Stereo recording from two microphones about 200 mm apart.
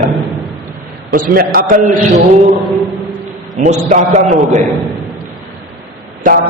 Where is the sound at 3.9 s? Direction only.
40° right (ahead or behind).